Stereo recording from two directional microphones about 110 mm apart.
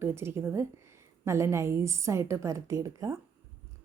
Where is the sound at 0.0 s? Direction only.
25° right (ahead or behind).